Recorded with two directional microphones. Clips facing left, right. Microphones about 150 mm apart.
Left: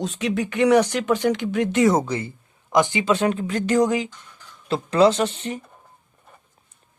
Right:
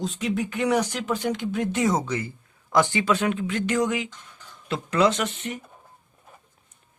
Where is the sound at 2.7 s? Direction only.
15° left (ahead or behind).